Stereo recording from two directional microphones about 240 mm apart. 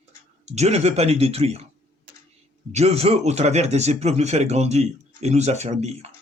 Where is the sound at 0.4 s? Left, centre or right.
Right.